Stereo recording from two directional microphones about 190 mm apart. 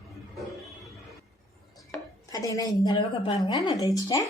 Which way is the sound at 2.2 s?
15° left (ahead or behind).